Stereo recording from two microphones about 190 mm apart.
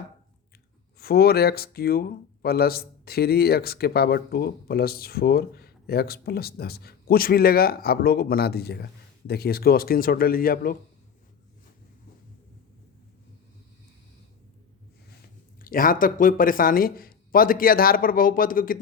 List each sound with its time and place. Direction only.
0.9 s speech: 55° left (ahead or behind)
15.6 s speech: 50° left (ahead or behind)